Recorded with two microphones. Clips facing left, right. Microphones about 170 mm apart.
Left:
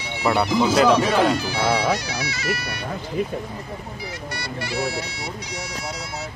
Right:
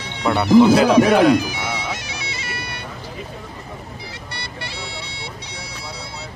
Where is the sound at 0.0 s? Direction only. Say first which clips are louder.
Right 1 dB; 5° left (ahead or behind).